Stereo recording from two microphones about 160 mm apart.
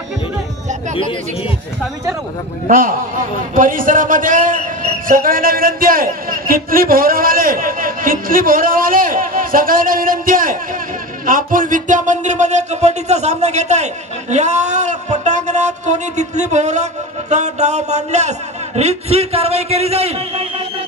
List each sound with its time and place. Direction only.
2.7 s a man's voice: 60° right (ahead or behind); by 20.6 s 40° right (ahead or behind)